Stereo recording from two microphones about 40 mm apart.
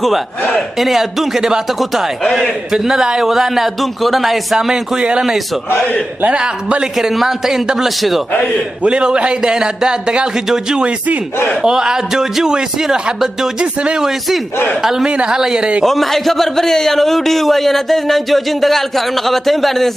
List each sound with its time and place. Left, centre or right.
0.6 s a man's voice: centre
6.3 s a man's voice: right
7.0 s a man's voice: centre
8.8 s a man's voice: right
11.6 s a man's voice: centre
13.9 s a man's voice: centre
15.0 s a man's voice: right
15.3 s a man's voice: centre
15.8 s a man's voice: centre